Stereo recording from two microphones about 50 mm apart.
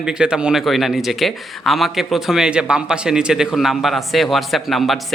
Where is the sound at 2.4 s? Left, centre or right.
Centre.